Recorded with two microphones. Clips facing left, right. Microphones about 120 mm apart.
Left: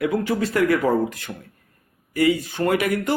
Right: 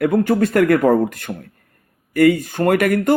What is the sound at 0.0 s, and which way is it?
Speech, 50° right (ahead or behind).